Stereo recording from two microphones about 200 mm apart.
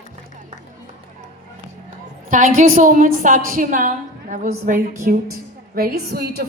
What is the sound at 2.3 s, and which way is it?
A woman's voice, 40° right (ahead or behind).